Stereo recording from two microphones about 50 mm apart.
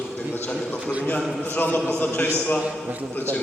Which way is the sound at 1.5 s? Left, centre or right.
Left.